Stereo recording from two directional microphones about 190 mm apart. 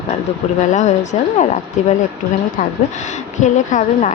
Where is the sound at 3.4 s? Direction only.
40° left (ahead or behind).